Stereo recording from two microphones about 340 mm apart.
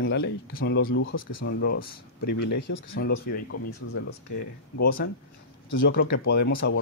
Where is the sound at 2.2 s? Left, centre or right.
Left.